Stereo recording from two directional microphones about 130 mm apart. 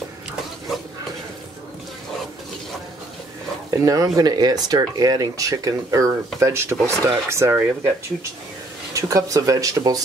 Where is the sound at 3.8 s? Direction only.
25° right (ahead or behind).